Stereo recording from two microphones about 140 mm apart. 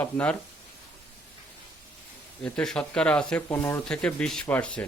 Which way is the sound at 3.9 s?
5° left (ahead or behind).